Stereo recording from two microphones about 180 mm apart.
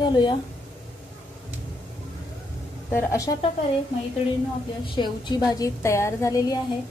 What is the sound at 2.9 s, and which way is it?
Speech, 15° left (ahead or behind).